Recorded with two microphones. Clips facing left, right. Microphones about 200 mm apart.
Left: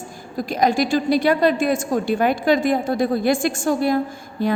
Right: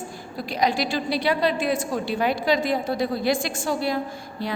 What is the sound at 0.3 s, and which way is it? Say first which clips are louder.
A woman's voice: left 5 dB; 45° left (ahead or behind).